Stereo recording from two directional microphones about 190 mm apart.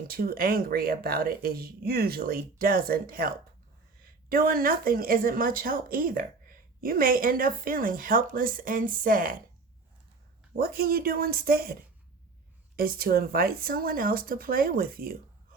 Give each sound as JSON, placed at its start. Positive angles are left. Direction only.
{"t": 0.1, "sound": "speech", "side_deg": -50}
{"t": 10.6, "sound": "speech", "side_deg": -50}